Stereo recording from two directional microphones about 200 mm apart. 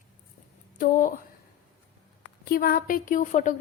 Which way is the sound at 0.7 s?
40° left (ahead or behind).